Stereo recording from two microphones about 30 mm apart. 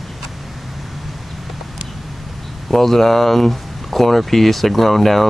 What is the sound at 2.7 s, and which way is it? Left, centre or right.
Speech, centre.